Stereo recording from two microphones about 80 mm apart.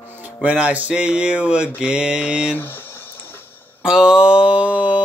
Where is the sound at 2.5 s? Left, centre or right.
Left.